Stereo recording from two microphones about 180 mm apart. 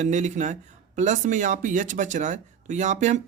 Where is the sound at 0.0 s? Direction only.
40° right (ahead or behind).